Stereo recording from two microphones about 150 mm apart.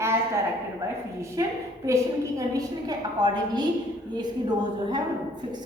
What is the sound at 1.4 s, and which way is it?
A woman's voice, 20° right (ahead or behind).